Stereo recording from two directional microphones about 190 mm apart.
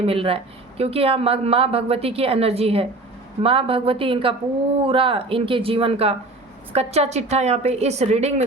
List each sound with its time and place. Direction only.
0.0 s speech: 30° right (ahead or behind)